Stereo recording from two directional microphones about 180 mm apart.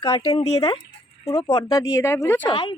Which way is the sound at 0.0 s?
25° left (ahead or behind).